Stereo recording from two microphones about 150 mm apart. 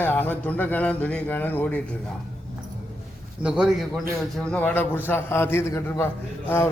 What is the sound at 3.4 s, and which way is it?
Speech, 5° right (ahead or behind).